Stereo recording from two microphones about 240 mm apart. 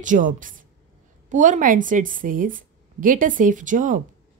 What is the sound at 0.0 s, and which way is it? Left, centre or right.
Speech, right.